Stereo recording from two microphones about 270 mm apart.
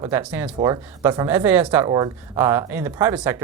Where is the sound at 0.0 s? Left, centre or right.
Centre.